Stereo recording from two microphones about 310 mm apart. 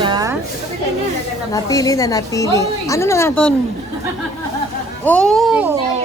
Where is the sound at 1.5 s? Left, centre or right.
Centre.